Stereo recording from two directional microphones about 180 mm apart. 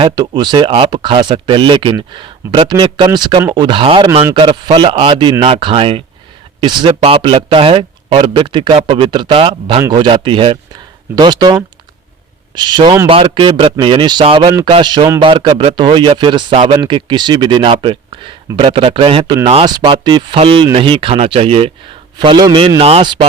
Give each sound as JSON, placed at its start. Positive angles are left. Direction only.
{"t": 0.0, "sound": "speech", "side_deg": -25}